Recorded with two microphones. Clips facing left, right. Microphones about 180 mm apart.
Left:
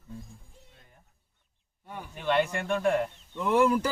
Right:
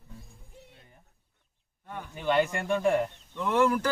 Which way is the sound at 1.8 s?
10° left (ahead or behind).